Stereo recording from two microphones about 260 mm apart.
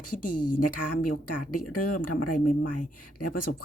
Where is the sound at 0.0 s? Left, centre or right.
Left.